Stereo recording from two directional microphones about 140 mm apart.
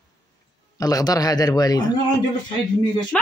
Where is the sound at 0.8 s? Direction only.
25° left (ahead or behind).